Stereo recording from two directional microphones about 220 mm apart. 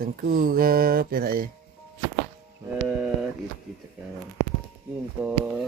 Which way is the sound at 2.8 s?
Centre (ahead or behind).